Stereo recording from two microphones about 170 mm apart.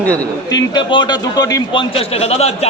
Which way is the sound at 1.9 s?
35° left (ahead or behind).